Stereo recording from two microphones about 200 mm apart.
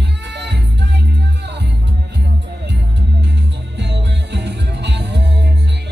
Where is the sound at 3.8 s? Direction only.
60° right (ahead or behind).